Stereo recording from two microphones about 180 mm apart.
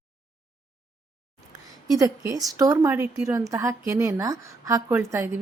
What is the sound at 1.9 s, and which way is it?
A woman's voice, 20° right (ahead or behind).